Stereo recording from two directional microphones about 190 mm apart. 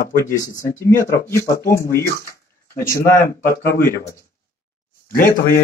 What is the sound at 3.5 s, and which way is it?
Speech, 55° left (ahead or behind).